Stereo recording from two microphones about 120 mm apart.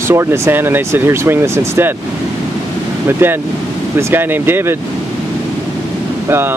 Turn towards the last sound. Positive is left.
turn(degrees=-20)  # may be behind; listen again after turning